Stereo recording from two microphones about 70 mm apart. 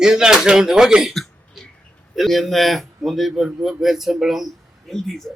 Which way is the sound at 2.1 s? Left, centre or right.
Centre.